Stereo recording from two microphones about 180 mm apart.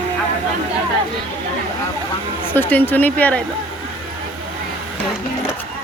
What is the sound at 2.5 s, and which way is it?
Speech, 10° left (ahead or behind).